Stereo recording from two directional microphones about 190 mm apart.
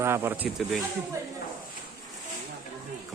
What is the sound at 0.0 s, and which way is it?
Speech, 15° right (ahead or behind).